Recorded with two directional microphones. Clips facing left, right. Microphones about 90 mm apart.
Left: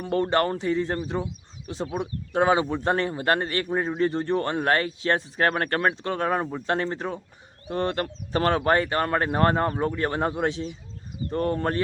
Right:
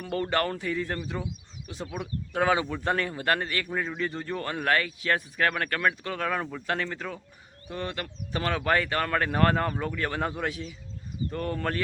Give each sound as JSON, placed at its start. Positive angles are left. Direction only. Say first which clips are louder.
{"t": 0.0, "sound": "speech", "louder": "left 5 dB", "side_deg": 30}